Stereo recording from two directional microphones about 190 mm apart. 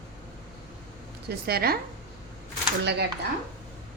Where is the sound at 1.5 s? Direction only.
55° right (ahead or behind).